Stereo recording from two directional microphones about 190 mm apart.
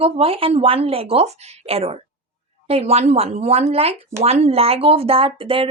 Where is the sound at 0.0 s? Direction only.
30° right (ahead or behind).